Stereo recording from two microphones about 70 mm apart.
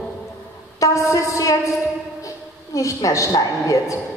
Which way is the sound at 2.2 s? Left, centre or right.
Left.